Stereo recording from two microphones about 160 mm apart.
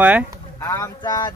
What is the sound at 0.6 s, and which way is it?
Speech, 20° left (ahead or behind).